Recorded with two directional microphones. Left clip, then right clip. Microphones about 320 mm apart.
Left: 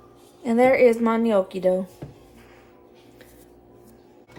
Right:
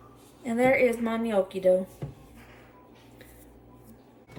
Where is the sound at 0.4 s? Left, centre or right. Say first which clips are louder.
Left 6 dB; centre.